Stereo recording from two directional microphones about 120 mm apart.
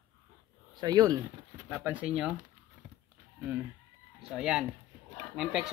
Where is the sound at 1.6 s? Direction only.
15° right (ahead or behind).